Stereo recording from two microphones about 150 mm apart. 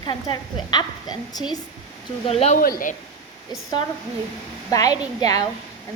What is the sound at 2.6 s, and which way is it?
Speech, 70° left (ahead or behind).